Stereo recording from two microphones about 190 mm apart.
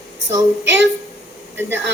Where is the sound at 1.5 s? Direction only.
10° right (ahead or behind).